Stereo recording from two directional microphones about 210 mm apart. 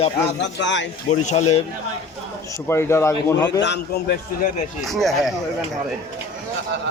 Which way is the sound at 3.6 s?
55° left (ahead or behind).